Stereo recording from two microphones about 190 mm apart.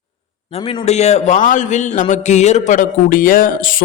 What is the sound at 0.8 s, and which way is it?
Speech, 35° left (ahead or behind).